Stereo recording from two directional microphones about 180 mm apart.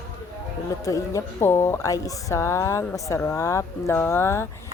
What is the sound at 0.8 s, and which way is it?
A woman's voice, 20° left (ahead or behind).